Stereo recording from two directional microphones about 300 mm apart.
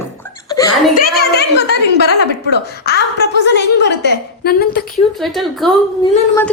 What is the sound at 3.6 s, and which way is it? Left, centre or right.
Speech, left.